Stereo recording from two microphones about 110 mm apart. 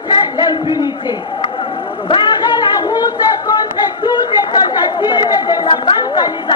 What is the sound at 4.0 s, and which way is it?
Chatter, 40° left (ahead or behind).